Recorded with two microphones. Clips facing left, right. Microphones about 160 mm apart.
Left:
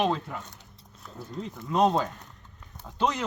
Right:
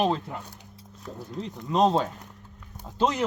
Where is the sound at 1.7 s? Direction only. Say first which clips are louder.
Right 1 dB; 20° right (ahead or behind).